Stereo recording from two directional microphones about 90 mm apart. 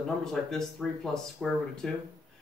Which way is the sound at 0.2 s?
5° left (ahead or behind).